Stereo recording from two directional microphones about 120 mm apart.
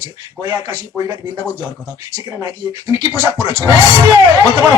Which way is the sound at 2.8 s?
30° right (ahead or behind).